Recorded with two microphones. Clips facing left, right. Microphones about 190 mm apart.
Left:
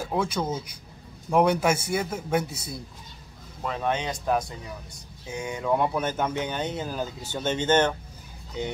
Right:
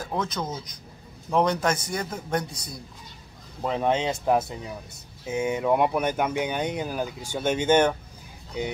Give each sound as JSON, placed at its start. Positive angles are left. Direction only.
{"t": 0.0, "sound": "a man's voice", "side_deg": 10}
{"t": 3.6, "sound": "speech", "side_deg": -20}